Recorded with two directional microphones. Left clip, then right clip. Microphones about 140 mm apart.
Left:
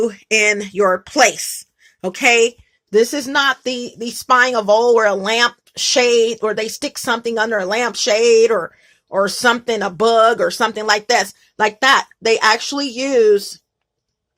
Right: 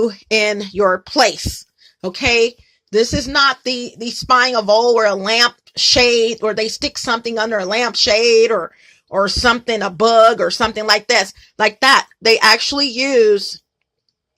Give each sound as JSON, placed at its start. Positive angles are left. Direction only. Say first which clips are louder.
{"t": 0.0, "sound": "speech", "louder": "even", "side_deg": -40}
{"t": 0.8, "sound": "speech", "louder": "right 2 dB", "side_deg": -15}
{"t": 1.0, "sound": "a woman's voice", "louder": "left 1 dB", "side_deg": -35}
{"t": 2.9, "sound": "speech", "louder": "left 1 dB", "side_deg": -15}